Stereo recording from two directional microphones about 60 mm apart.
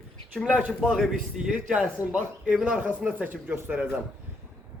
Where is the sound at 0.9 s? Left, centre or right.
Centre.